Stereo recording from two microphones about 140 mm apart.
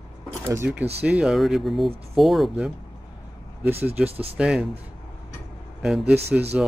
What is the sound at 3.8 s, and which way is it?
Speech, 10° right (ahead or behind).